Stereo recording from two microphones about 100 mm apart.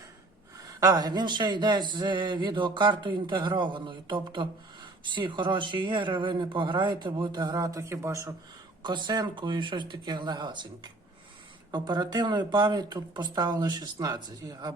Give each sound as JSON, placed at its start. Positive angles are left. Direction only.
{"t": 0.5, "sound": "speech", "side_deg": -35}
{"t": 7.5, "sound": "a man's voice", "side_deg": -35}
{"t": 8.8, "sound": "speech", "side_deg": -50}
{"t": 11.7, "sound": "speech", "side_deg": -45}